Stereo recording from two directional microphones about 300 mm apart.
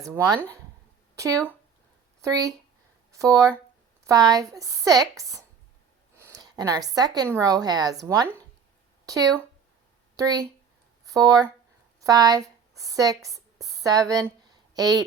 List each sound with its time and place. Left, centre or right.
0.0 s a woman's voice: centre
11.0 s a sound: centre
12.0 s a woman's voice: centre